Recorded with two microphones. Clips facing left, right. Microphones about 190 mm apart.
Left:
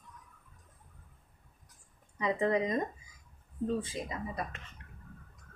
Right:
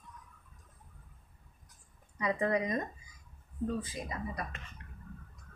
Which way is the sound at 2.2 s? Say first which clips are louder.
Left 2 dB; 25° left (ahead or behind).